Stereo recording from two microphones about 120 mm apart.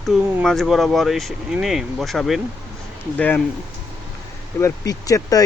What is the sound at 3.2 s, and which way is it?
Speech, 10° left (ahead or behind).